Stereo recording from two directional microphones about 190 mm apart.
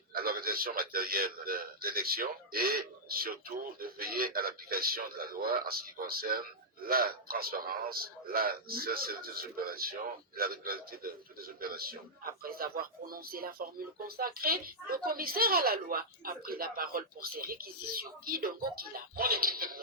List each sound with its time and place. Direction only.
0.1 s a man's voice: 50° right (ahead or behind)